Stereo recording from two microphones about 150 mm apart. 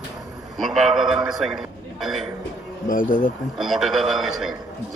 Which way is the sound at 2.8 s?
65° left (ahead or behind).